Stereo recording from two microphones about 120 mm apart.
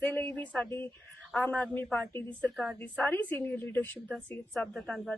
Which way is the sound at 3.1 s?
15° left (ahead or behind).